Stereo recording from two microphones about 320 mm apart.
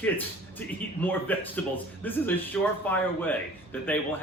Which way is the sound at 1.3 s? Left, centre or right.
Centre.